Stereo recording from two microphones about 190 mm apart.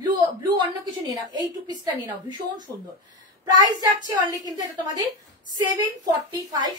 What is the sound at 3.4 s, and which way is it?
Speech, 20° right (ahead or behind).